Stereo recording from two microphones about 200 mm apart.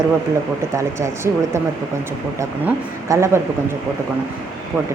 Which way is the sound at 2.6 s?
15° right (ahead or behind).